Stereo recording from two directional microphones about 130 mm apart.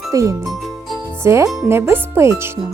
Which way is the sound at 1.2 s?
20° right (ahead or behind).